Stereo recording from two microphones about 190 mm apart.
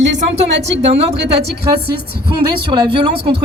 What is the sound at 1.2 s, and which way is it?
Speech, 60° right (ahead or behind).